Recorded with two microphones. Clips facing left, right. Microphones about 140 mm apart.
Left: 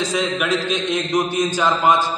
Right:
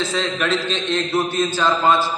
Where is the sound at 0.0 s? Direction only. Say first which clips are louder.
Left 1 dB; 15° left (ahead or behind).